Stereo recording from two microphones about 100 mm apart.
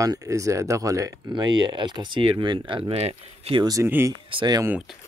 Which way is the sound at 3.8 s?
25° right (ahead or behind).